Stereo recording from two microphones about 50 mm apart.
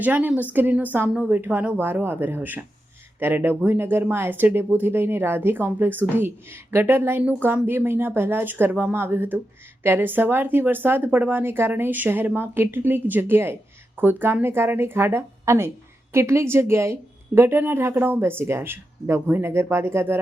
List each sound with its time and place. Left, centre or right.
0.0 s a woman's voice: right
12.4 s a woman's voice: right